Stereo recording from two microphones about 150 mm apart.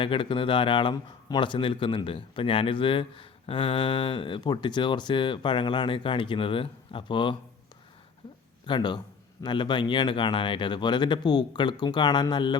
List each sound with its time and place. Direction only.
0.0 s speech: 35° left (ahead or behind)
8.6 s speech: 30° left (ahead or behind)